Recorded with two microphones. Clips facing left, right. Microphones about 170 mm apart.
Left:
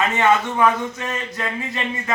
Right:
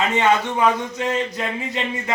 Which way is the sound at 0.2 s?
20° right (ahead or behind).